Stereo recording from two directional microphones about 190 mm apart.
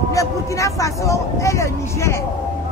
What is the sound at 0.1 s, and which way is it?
Speech, 15° left (ahead or behind).